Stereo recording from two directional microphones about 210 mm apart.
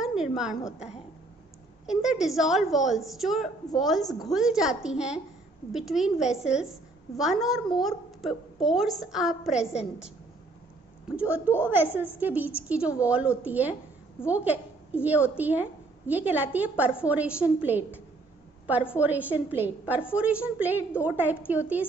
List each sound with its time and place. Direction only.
0.0 s a woman's voice: centre (ahead or behind)
1.9 s a woman's voice: centre (ahead or behind)
9.7 s a woman's voice: 30° left (ahead or behind)
11.1 s a woman's voice: 5° right (ahead or behind)
18.9 s a woman's voice: 5° right (ahead or behind)